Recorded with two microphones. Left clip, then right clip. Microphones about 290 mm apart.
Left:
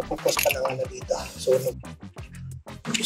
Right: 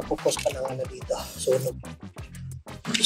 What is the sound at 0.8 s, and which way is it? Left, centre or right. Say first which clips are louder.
Speech: left 2 dB; centre.